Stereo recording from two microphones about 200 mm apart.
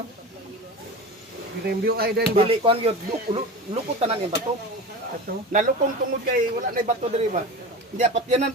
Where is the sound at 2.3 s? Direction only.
30° right (ahead or behind).